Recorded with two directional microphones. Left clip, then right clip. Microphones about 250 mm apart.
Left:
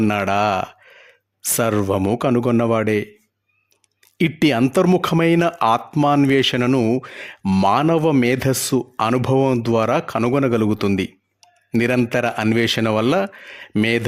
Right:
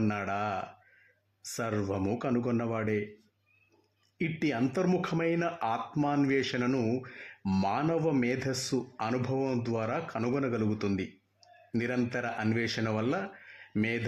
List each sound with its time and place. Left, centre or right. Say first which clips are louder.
0.0 s speech: left 14 dB; left
4.2 s speech: left 14 dB; left